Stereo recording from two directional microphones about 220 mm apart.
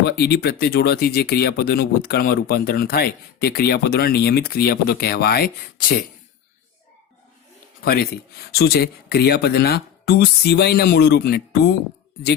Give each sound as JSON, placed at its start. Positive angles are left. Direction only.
{"t": 0.0, "sound": "speech", "side_deg": 45}
{"t": 7.9, "sound": "speech", "side_deg": 45}